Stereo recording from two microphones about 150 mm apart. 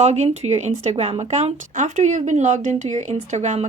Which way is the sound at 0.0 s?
50° right (ahead or behind).